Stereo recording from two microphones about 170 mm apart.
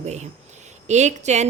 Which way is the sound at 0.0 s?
40° right (ahead or behind).